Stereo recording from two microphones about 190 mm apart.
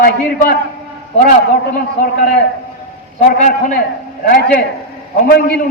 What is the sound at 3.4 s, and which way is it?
Speech, 45° left (ahead or behind).